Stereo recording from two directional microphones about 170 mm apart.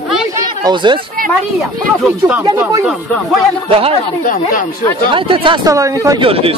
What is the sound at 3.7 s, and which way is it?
Speech, 35° right (ahead or behind).